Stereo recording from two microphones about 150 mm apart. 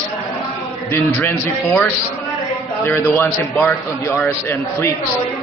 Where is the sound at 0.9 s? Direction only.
15° left (ahead or behind).